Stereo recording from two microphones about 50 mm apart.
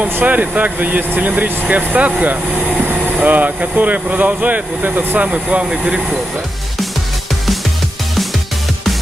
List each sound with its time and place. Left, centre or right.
0.0 s speech: right
5.3 s speech: right